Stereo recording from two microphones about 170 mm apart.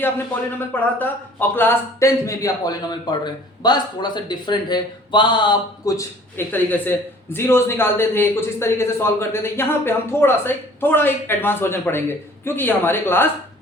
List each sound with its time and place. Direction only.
0.7 s a man's voice: 10° left (ahead or behind)